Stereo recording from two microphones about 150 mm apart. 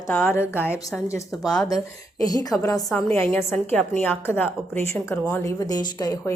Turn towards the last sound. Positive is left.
turn(degrees=25)  # may be behind; listen again after turning